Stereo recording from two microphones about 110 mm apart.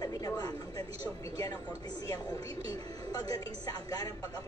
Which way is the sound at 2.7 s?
35° left (ahead or behind).